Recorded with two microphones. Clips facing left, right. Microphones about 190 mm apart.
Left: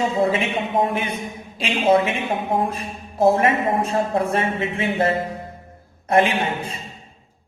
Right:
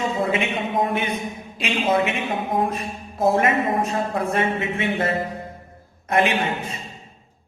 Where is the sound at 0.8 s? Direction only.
30° left (ahead or behind).